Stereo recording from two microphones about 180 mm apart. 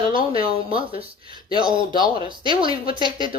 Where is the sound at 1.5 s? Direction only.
25° right (ahead or behind).